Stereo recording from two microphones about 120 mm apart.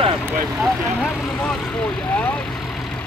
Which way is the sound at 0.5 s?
Centre (ahead or behind).